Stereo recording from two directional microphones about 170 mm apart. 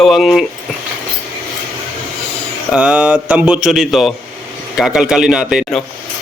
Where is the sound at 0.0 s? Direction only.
Centre (ahead or behind).